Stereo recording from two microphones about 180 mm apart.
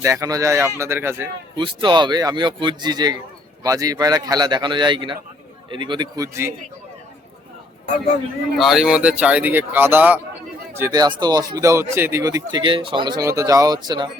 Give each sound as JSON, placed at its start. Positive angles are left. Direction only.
{"t": 0.0, "sound": "speech", "side_deg": -20}
{"t": 1.5, "sound": "speech", "side_deg": -25}
{"t": 8.5, "sound": "speech", "side_deg": 0}